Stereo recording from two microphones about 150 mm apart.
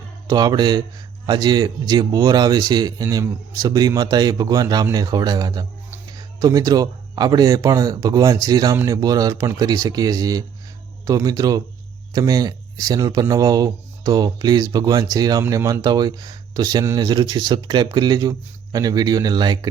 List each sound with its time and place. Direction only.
0.3 s speech: 25° right (ahead or behind)